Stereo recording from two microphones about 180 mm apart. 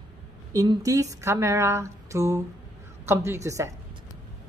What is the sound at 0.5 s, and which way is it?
Speech, 20° right (ahead or behind).